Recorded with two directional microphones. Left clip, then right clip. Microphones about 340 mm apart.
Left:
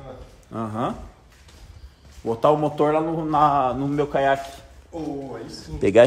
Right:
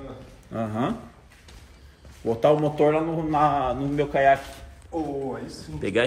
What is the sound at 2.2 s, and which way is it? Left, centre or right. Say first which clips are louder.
A man's voice: left 1 dB; centre.